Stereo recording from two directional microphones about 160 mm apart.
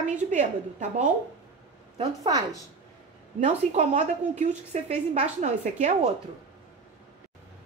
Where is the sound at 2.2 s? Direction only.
20° right (ahead or behind).